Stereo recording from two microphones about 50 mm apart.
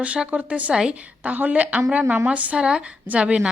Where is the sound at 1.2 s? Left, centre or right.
Right.